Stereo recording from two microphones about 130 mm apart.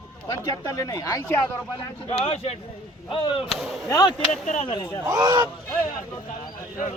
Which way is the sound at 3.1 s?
40° left (ahead or behind).